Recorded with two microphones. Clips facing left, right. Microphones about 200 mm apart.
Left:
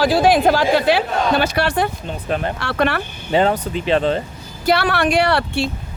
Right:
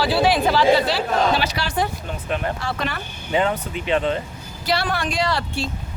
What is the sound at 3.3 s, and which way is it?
Speech, 35° left (ahead or behind).